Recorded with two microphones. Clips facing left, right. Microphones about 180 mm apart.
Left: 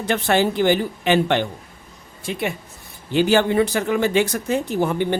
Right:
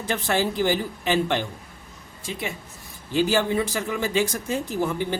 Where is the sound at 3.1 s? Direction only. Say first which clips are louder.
Left 4 dB; 65° left (ahead or behind).